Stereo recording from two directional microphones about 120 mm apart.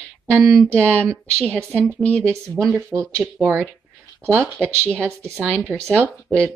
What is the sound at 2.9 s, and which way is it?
Speech, 30° right (ahead or behind).